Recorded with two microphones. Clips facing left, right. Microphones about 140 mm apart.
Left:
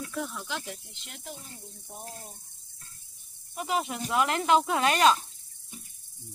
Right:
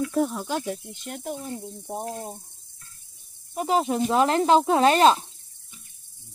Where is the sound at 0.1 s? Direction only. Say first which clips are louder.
Right 10 dB; 40° right (ahead or behind).